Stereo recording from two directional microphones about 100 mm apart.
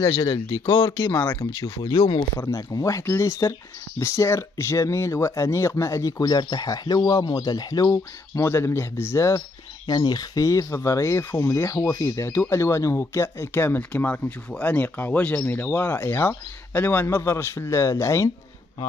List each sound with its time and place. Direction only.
0.2 s speech: 50° left (ahead or behind)
2.4 s speech: 30° left (ahead or behind)
9.8 s speech: 40° left (ahead or behind)